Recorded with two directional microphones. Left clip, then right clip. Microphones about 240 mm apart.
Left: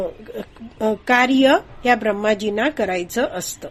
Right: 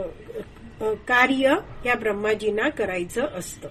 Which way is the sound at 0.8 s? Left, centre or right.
Left.